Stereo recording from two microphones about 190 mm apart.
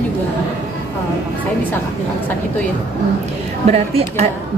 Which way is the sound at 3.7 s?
35° right (ahead or behind).